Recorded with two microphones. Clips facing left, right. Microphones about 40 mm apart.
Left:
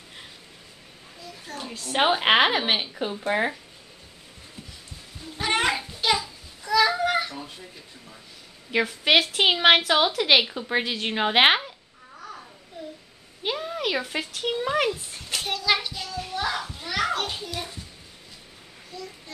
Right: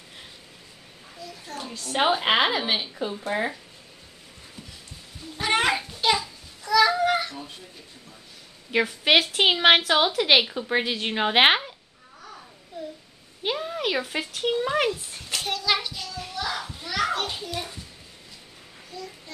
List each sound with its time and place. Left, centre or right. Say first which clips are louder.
1.7 s a woman's voice: left 1 dB; centre
2.2 s a woman's voice: left 2 dB; left
3.3 s speech: left 3 dB; left
5.4 s a sound: right 1 dB; centre
8.7 s a woman's voice: even; centre
13.4 s speech: right 1 dB; centre
16.5 s children playing: even; centre